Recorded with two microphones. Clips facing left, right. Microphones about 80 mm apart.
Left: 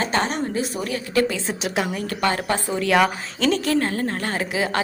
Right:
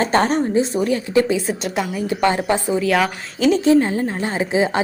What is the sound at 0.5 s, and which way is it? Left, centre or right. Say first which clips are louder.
Speech: right 7 dB; right.